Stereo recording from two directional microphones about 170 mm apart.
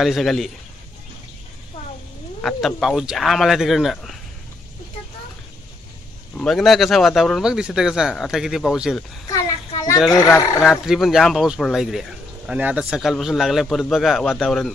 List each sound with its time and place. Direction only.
0.0 s speech: centre (ahead or behind)
2.4 s speech: centre (ahead or behind)
6.3 s speech: centre (ahead or behind)
10.1 s speech: 20° left (ahead or behind)
10.6 s speech: centre (ahead or behind)